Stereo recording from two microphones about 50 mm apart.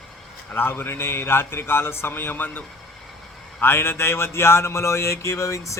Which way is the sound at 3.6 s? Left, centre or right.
Left.